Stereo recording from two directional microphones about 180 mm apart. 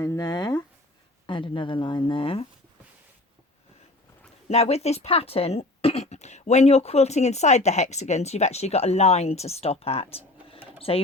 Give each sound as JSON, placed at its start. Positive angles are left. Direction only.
{"t": 0.0, "sound": "speech", "side_deg": 20}
{"t": 4.4, "sound": "speech", "side_deg": 35}
{"t": 10.8, "sound": "sewing machine", "side_deg": 30}